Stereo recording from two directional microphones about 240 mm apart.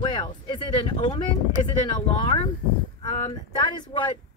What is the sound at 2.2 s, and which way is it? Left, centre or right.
Speech, left.